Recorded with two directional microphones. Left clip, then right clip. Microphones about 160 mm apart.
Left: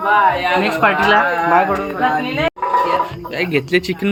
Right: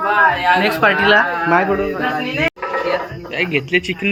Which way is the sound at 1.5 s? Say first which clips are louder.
Left 1 dB; 90° right.